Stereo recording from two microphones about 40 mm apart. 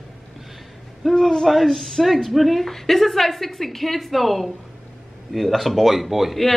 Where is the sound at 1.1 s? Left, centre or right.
Centre.